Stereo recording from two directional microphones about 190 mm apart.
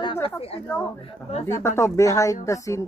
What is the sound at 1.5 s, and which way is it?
Speech, 15° left (ahead or behind).